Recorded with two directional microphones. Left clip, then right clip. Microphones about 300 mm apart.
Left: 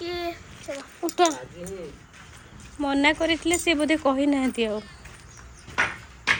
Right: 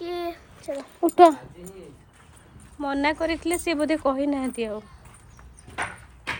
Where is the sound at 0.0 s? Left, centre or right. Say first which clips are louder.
Even; right.